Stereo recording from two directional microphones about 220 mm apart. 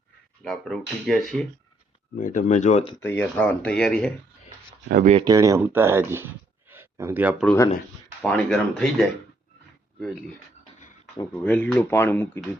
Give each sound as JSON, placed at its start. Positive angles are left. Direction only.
{"t": 0.4, "sound": "speech", "side_deg": 0}
{"t": 2.1, "sound": "speech", "side_deg": 35}
{"t": 3.0, "sound": "speech", "side_deg": 10}
{"t": 5.0, "sound": "speech", "side_deg": -25}
{"t": 5.3, "sound": "speech", "side_deg": -15}
{"t": 11.2, "sound": "speech", "side_deg": 5}